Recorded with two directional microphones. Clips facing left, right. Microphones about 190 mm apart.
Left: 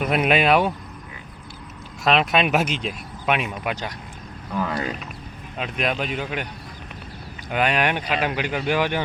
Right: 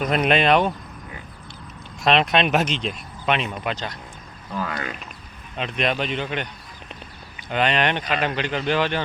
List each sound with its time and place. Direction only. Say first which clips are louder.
0.0 s speech: even; 5° left (ahead or behind)
2.0 s speech: right 1 dB; 5° left (ahead or behind)
4.7 s speech: left 4 dB; 35° left (ahead or behind)
5.5 s speech: right 1 dB; 5° left (ahead or behind)
7.5 s speech: even; 10° left (ahead or behind)